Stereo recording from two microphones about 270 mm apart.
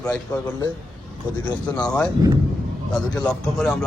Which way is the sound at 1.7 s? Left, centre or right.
Centre.